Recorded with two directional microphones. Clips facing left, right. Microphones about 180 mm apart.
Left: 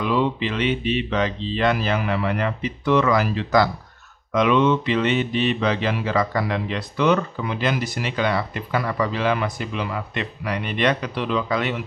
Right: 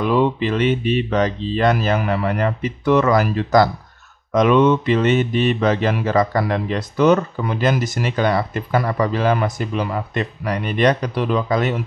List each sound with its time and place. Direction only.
0.0 s mantra: 45° right (ahead or behind)